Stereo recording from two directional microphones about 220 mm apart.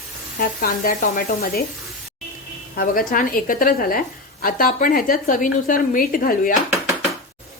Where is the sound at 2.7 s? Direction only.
40° left (ahead or behind).